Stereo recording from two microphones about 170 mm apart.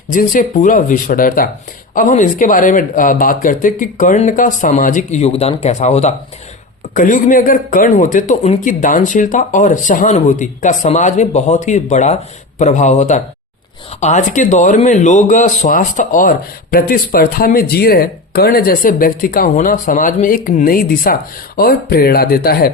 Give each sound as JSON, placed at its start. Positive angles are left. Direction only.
{"t": 0.1, "sound": "speech", "side_deg": 50}